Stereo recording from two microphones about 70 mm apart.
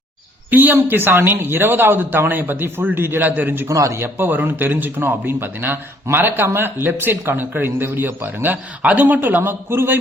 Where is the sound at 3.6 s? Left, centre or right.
Right.